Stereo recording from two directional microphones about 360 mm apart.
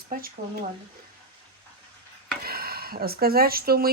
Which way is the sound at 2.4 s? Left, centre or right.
Right.